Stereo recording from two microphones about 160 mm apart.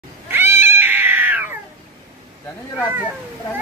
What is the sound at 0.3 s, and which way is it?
Cat, 15° right (ahead or behind).